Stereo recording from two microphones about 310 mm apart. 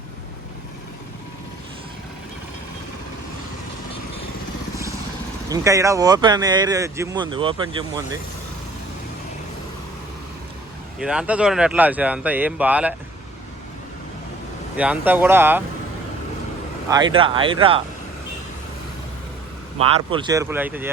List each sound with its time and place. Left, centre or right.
5.5 s speech: centre
11.0 s speech: centre
14.8 s speech: centre
17.2 s speech: centre
19.8 s speech: centre